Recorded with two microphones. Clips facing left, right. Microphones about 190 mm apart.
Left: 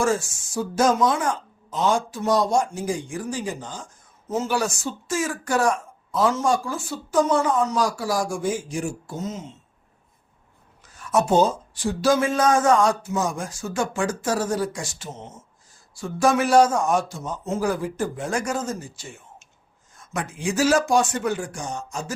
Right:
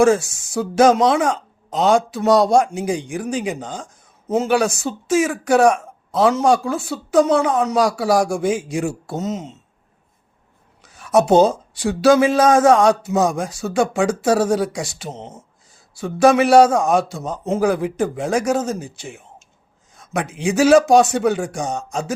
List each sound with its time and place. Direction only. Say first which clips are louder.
0.0 s speech: right 8 dB; 75° right (ahead or behind)
4.4 s speech: right 7 dB; 65° right (ahead or behind)
10.8 s speech: right 6 dB; 75° right (ahead or behind)
20.0 s a sound: right 6 dB; 70° right (ahead or behind)
20.6 s speech: right 8 dB; 70° right (ahead or behind)